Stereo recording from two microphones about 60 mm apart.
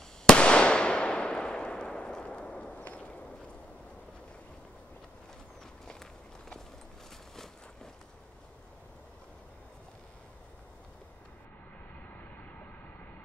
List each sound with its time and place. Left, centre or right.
0.3 s fireworks: centre
7.3 s a sound: centre
12.2 s vehicle: left